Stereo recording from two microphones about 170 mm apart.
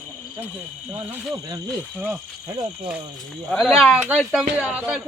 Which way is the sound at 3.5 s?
Centre (ahead or behind).